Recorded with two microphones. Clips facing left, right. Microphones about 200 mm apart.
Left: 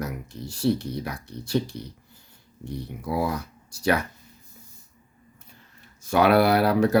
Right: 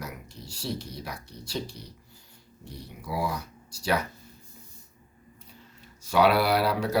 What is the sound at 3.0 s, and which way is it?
Speech, 55° left (ahead or behind).